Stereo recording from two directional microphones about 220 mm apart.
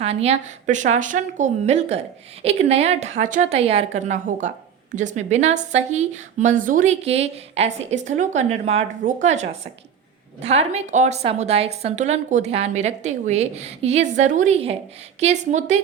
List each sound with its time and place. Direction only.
0.0 s a woman's voice: 30° right (ahead or behind)